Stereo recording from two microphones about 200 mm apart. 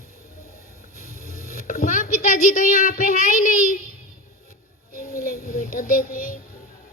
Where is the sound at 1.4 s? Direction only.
45° left (ahead or behind).